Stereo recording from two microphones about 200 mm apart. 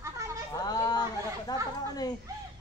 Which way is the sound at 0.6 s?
20° left (ahead or behind).